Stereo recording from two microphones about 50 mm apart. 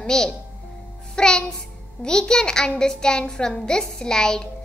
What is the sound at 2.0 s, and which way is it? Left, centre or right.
A child's voice, centre.